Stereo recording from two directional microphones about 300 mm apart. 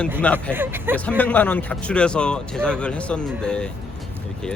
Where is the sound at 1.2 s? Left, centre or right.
Centre.